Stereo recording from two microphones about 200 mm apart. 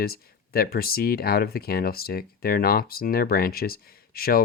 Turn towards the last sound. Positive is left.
turn(degrees=50)  # may be behind; listen again after turning